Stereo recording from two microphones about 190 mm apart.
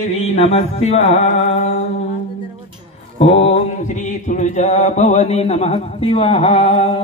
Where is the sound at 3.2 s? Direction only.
35° left (ahead or behind).